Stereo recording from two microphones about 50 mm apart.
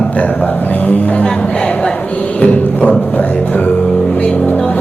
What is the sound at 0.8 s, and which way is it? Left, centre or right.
Speech, left.